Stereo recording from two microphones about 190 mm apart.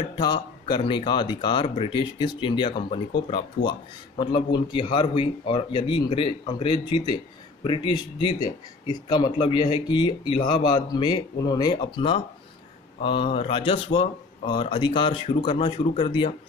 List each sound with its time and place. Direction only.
0.1 s speech: 25° left (ahead or behind)
4.2 s speech: 25° left (ahead or behind)